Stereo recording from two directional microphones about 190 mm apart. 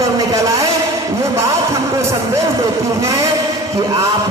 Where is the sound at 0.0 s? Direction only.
15° right (ahead or behind).